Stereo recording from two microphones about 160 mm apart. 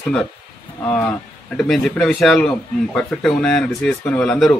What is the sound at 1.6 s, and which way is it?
A man's voice, centre (ahead or behind).